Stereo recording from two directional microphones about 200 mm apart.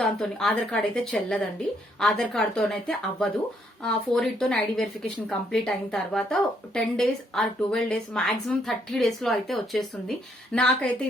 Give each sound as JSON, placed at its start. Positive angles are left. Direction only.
{"t": 0.0, "sound": "a woman's voice", "side_deg": 5}